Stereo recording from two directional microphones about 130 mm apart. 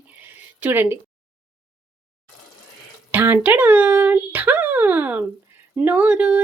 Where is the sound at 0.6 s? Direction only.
15° right (ahead or behind).